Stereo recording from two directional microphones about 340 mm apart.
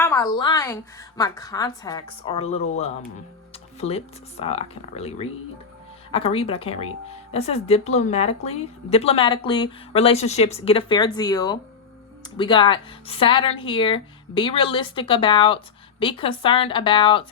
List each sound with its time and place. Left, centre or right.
0.0 s speech: centre